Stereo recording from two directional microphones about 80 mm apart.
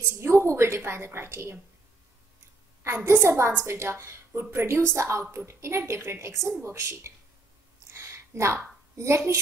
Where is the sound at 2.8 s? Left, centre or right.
Right.